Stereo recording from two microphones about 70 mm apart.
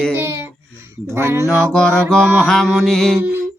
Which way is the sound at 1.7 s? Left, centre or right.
Centre.